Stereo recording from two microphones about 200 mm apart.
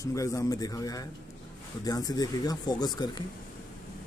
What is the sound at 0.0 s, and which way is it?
Speech, 15° left (ahead or behind).